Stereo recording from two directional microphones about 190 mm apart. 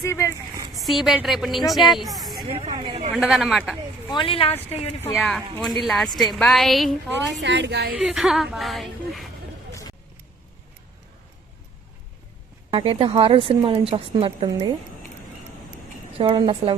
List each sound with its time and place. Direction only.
0.0 s a woman's voice: 15° left (ahead or behind)
0.7 s a woman's voice: centre (ahead or behind)
2.5 s speech: 30° right (ahead or behind)
3.2 s a woman's voice: centre (ahead or behind)
4.1 s speech: 25° left (ahead or behind)
5.1 s a woman's voice: centre (ahead or behind)
7.4 s a woman's voice: 65° right (ahead or behind)
7.9 s a woman's voice: 5° right (ahead or behind)
12.7 s speech: 30° right (ahead or behind)
16.1 s speech: 30° right (ahead or behind)